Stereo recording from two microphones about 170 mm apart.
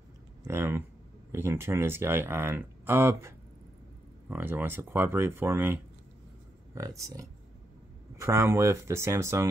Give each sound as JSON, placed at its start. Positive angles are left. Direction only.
{"t": 0.5, "sound": "speech", "side_deg": -15}